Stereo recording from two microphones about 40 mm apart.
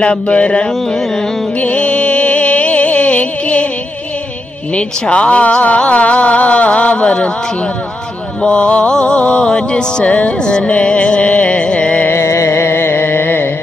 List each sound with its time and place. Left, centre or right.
0.0 s music: left
0.8 s a sound: centre
1.6 s music: left
4.7 s speech: left
8.4 s music: left
12.1 s music: left